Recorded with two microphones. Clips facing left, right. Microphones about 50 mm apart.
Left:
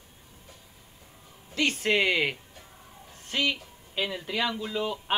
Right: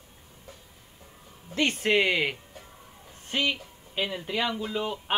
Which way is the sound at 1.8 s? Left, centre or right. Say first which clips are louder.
Right 1 dB; centre.